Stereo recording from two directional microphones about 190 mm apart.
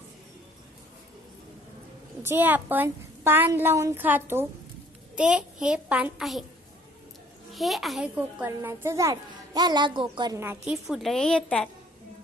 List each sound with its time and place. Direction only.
2.2 s a child's voice: 10° right (ahead or behind)
7.5 s a child's voice: centre (ahead or behind); by 10.4 s 25° right (ahead or behind)
10.4 s a child's voice: 10° right (ahead or behind)